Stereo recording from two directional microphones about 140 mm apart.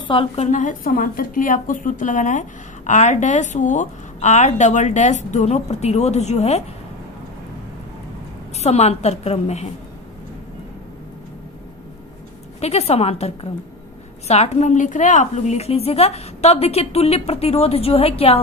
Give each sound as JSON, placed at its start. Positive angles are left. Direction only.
{"t": 0.4, "sound": "a woman's voice", "side_deg": 60}
{"t": 8.5, "sound": "a woman's voice", "side_deg": 50}
{"t": 12.5, "sound": "a woman's voice", "side_deg": 50}